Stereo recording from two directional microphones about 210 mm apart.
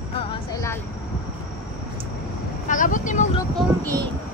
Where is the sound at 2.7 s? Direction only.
40° left (ahead or behind).